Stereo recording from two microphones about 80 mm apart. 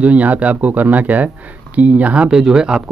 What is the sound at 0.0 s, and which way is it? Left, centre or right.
Speech, centre.